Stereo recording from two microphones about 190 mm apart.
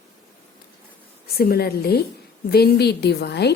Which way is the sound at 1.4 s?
55° left (ahead or behind).